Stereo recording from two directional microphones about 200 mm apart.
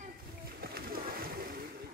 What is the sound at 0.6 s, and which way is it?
Splash, 50° right (ahead or behind).